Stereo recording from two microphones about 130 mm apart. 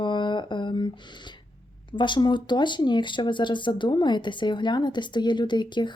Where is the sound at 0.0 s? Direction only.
35° left (ahead or behind).